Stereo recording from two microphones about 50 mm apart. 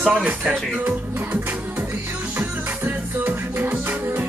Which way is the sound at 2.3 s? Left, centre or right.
Right.